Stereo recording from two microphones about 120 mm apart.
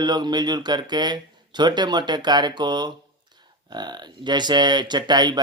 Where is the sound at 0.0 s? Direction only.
35° right (ahead or behind).